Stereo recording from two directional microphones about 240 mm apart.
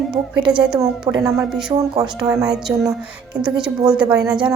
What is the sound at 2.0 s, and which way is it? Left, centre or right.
Speech, centre.